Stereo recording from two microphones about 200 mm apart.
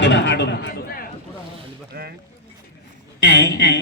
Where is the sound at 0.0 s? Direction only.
65° left (ahead or behind).